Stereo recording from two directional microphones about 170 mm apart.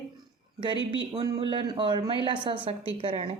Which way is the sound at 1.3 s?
30° right (ahead or behind).